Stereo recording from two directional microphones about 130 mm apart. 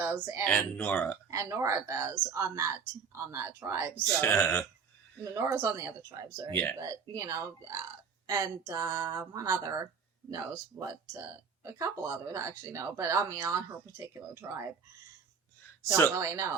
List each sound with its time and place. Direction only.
0.0 s speech: 15° right (ahead or behind)
0.4 s speech: 10° left (ahead or behind)
1.3 s speech: 25° right (ahead or behind)
3.9 s speech: 20° left (ahead or behind)
5.2 s speech: 20° right (ahead or behind)
16.1 s speech: 25° right (ahead or behind)